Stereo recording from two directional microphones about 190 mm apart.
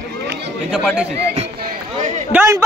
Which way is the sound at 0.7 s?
5° right (ahead or behind).